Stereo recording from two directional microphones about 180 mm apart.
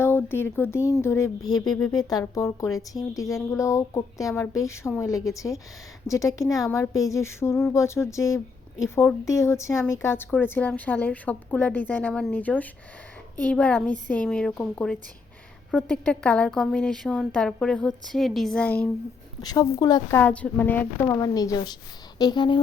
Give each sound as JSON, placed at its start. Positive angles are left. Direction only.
{"t": 0.0, "sound": "speech", "side_deg": 10}
{"t": 1.6, "sound": "speech", "side_deg": 0}
{"t": 1.9, "sound": "a woman's voice", "side_deg": 20}
{"t": 19.4, "sound": "a woman's voice", "side_deg": 20}